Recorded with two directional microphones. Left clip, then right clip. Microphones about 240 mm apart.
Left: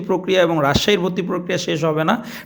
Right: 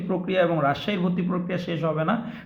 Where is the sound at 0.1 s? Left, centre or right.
Left.